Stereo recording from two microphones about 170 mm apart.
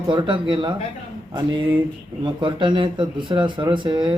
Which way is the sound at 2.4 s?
30° right (ahead or behind).